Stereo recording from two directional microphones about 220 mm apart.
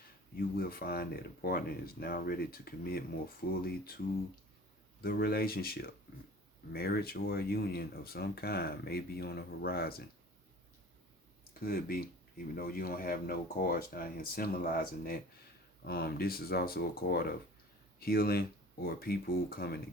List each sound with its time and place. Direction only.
0.3 s speech: 45° left (ahead or behind)
11.6 s speech: 40° left (ahead or behind)